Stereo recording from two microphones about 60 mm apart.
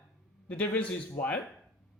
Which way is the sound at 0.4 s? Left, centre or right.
Left.